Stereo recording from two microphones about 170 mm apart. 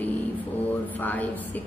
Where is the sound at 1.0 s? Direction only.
10° left (ahead or behind).